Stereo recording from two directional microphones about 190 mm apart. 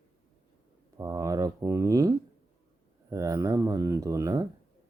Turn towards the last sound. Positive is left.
turn(degrees=-20)  # may be behind; listen again after turning